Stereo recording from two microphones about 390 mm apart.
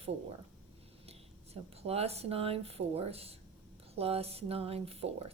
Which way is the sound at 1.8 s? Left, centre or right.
Centre.